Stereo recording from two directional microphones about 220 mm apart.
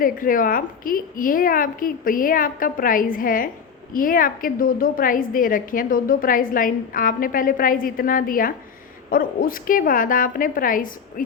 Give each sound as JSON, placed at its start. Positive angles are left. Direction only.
{"t": 0.0, "sound": "a woman's voice", "side_deg": 40}